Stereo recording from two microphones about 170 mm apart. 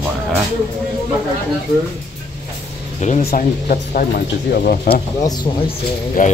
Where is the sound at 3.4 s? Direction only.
60° left (ahead or behind).